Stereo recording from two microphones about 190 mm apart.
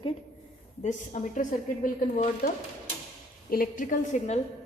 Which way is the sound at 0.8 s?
40° left (ahead or behind).